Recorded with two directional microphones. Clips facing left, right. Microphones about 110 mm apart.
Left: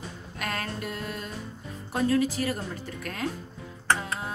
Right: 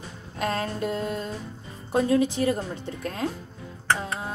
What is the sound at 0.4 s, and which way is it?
Speech, 25° right (ahead or behind).